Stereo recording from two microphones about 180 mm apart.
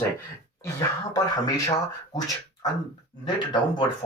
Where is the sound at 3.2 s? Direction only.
25° left (ahead or behind).